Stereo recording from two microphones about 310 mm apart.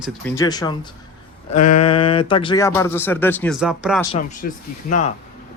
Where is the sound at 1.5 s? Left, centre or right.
Left.